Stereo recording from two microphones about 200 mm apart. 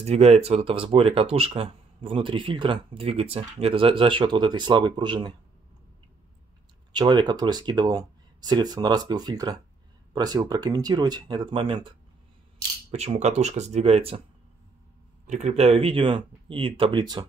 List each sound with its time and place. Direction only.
0.0 s speech: 30° right (ahead or behind)
6.9 s speech: 20° right (ahead or behind)
12.9 s speech: 35° right (ahead or behind)
15.2 s speech: 35° right (ahead or behind)